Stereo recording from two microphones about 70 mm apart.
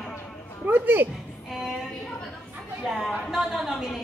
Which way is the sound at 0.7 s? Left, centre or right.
Right.